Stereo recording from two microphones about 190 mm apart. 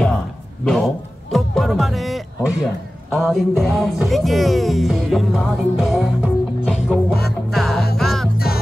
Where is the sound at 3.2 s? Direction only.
Centre (ahead or behind).